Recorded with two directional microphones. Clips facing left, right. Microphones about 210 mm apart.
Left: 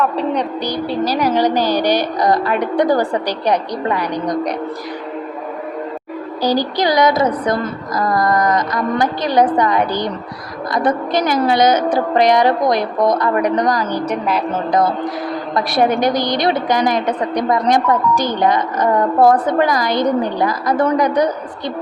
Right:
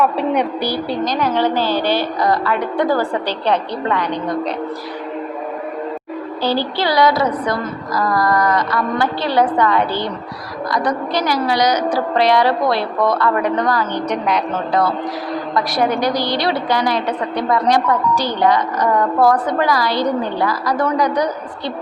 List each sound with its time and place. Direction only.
0.0 s a woman's voice: 10° right (ahead or behind)
1.0 s a woman's voice: 10° left (ahead or behind)
6.4 s a woman's voice: 15° left (ahead or behind)
11.1 s a woman's voice: 50° left (ahead or behind)
11.4 s a woman's voice: 25° left (ahead or behind)
14.1 s a woman's voice: 5° left (ahead or behind)
14.7 s a woman's voice: 20° left (ahead or behind)
16.8 s a woman's voice: 45° left (ahead or behind)
17.3 s a woman's voice: 20° left (ahead or behind)
18.1 s a woman's voice: 50° left (ahead or behind)
18.4 s a woman's voice: 25° left (ahead or behind)